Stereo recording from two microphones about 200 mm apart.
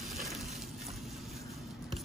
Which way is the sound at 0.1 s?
Centre (ahead or behind).